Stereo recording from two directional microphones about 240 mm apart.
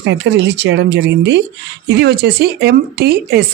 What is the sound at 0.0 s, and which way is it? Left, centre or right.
Speech, right.